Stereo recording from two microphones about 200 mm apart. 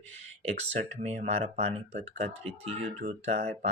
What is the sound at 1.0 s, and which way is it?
Speech, 30° right (ahead or behind).